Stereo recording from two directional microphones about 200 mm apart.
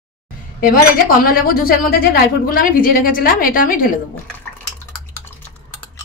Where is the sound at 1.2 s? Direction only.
45° left (ahead or behind).